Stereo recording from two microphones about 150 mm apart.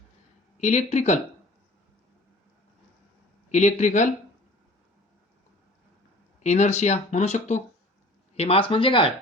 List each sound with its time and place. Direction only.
0.6 s speech: 45° left (ahead or behind)
3.5 s speech: 50° left (ahead or behind)
6.4 s speech: 50° left (ahead or behind)